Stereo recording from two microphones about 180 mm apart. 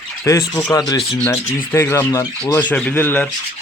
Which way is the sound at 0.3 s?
15° left (ahead or behind).